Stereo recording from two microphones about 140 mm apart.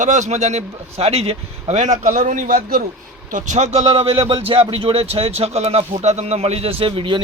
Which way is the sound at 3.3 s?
60° right (ahead or behind).